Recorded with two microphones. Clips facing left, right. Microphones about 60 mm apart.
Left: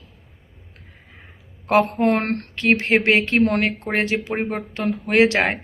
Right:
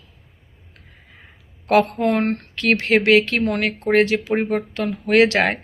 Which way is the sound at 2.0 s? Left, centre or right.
Left.